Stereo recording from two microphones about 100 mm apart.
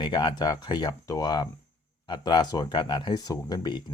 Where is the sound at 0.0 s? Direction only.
50° left (ahead or behind).